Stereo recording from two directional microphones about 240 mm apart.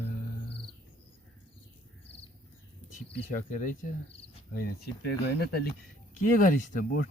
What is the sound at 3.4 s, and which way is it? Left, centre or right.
Speech, left.